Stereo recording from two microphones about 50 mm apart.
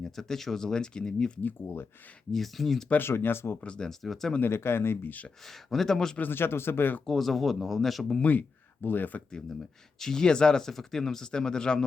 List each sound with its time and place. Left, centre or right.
0.0 s speech: centre
1.6 s speech: left
2.3 s speech: centre
3.0 s speech: left
3.6 s speech: left
3.8 s speech: centre
4.4 s speech: left
5.4 s speech: centre
6.1 s speech: left
7.0 s speech: centre
8.2 s speech: left
10.0 s speech: centre